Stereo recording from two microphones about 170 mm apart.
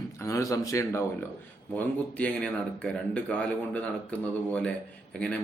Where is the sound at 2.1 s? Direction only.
5° left (ahead or behind).